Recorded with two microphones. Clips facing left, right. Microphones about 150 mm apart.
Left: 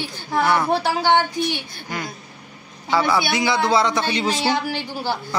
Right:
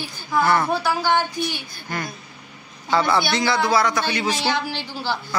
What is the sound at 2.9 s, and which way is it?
Speech, 5° left (ahead or behind).